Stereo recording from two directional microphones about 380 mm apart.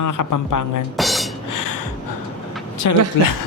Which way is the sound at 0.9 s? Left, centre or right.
Centre.